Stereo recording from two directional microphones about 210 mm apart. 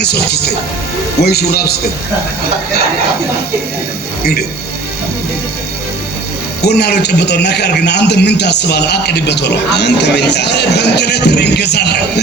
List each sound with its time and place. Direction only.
0.0 s a man's voice: 50° left (ahead or behind)
4.2 s a man's voice: 50° left (ahead or behind)
6.6 s a man's voice: 50° left (ahead or behind)